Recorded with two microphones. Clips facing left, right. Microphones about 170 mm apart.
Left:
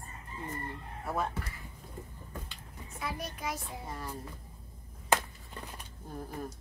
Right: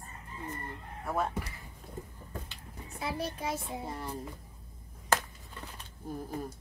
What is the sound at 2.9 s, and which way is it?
Speech, 30° right (ahead or behind).